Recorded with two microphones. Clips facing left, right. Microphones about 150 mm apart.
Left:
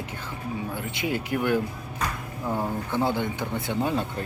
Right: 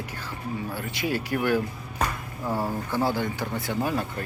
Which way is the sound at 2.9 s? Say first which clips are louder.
Left 1 dB; 20° left (ahead or behind).